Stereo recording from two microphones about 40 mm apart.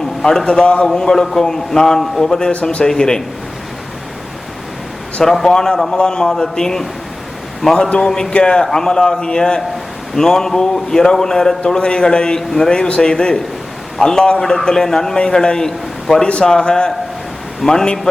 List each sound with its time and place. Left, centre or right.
0.3 s a man's voice: centre
0.6 s speech: left
0.9 s a man's voice: centre
5.2 s a man's voice: centre
8.3 s a man's voice: left